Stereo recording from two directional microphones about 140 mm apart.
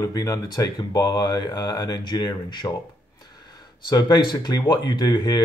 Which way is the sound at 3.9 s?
30° left (ahead or behind).